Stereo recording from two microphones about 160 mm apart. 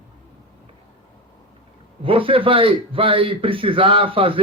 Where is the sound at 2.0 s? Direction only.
35° right (ahead or behind).